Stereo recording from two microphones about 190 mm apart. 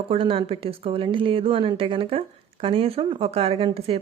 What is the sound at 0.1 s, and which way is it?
A woman's voice, 30° right (ahead or behind).